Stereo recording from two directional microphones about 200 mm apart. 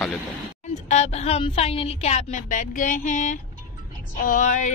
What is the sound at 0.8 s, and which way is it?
A woman's voice, 35° left (ahead or behind).